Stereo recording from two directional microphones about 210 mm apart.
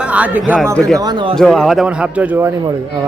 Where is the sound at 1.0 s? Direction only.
20° right (ahead or behind).